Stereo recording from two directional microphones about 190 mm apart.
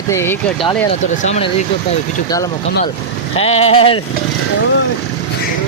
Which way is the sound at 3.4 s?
35° left (ahead or behind).